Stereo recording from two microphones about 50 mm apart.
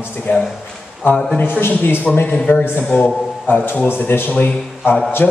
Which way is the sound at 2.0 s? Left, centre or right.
Left.